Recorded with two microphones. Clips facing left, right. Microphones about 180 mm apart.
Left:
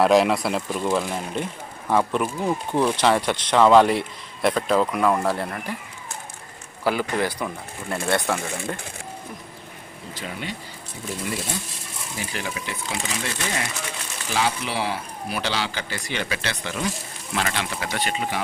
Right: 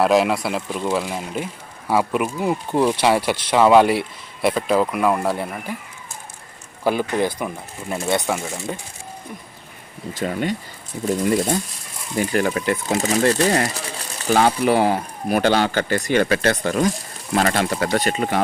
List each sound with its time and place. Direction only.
0.0 s speech: centre (ahead or behind)
6.8 s speech: 15° right (ahead or behind)
8.4 s speech: centre (ahead or behind)
10.2 s speech: 45° right (ahead or behind)
13.0 s speech: 40° right (ahead or behind)